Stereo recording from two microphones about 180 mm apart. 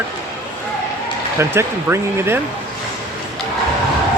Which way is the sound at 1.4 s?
15° right (ahead or behind).